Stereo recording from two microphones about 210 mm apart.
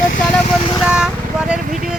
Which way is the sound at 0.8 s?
5° right (ahead or behind).